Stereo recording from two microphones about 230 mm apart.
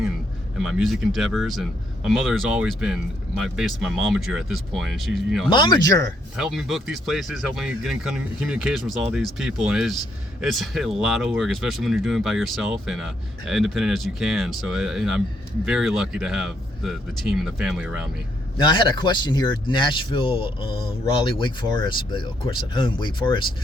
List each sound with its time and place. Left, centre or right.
0.6 s speech: centre
5.5 s speech: centre
6.3 s speech: centre
18.5 s speech: centre